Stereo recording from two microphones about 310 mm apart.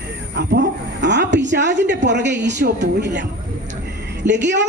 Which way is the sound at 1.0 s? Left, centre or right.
Right.